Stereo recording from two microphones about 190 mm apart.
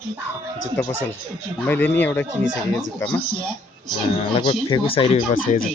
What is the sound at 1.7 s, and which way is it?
Speech, 10° left (ahead or behind).